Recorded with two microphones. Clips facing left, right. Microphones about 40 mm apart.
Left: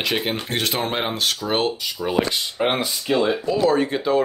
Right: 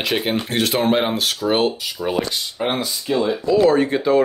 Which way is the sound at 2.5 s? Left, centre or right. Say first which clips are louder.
Left 1 dB; left.